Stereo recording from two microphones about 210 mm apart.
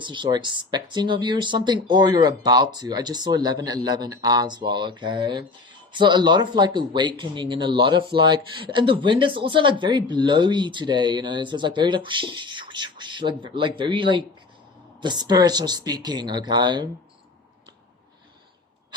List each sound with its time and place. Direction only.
0.0 s speech: 20° right (ahead or behind)